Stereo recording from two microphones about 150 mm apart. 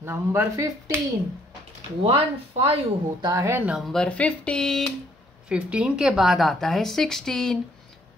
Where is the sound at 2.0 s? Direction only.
40° right (ahead or behind).